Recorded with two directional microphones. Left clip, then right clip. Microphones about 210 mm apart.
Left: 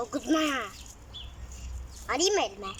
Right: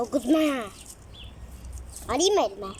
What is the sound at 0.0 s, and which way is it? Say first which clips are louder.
Speech: right 5 dB; 15° right (ahead or behind).